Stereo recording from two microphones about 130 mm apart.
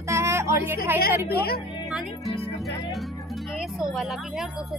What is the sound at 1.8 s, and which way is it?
Music, centre (ahead or behind).